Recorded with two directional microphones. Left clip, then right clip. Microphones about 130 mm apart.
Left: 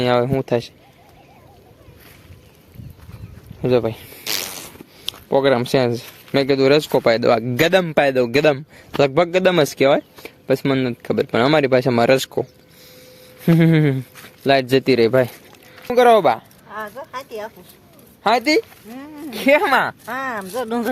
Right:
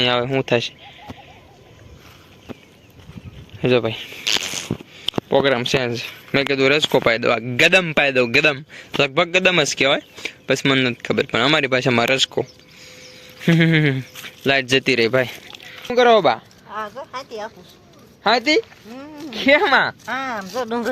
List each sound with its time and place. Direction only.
0.0 s speech: 15° left (ahead or behind)
3.6 s a sound: 15° left (ahead or behind)
5.3 s speech: 20° left (ahead or behind)
15.9 s speech: 40° left (ahead or behind)
16.6 s speech: 15° left (ahead or behind)
20.1 s speech: 65° left (ahead or behind)